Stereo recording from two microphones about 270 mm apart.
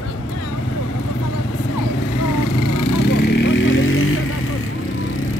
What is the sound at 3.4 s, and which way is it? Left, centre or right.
Vehicle, left.